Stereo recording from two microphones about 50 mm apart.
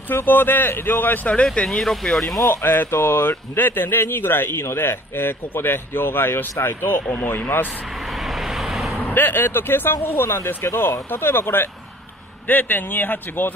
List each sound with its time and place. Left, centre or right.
0.1 s speech: left
1.3 s speech: left
1.8 s speech: centre
2.4 s speech: left
7.2 s speech: left
8.3 s vehicle: centre
9.1 s speech: left